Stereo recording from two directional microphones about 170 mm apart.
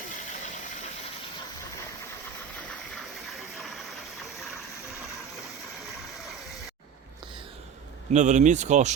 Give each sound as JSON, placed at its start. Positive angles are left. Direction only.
{"t": 8.1, "sound": "speech", "side_deg": -45}